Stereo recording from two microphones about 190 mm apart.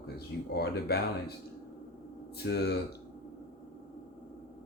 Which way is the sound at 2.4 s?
60° left (ahead or behind).